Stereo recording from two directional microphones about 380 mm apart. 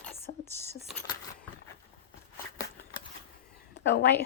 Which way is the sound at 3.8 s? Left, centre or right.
Left.